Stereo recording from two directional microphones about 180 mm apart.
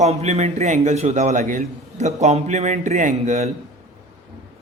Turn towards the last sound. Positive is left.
turn(degrees=-40)  # may be behind; listen again after turning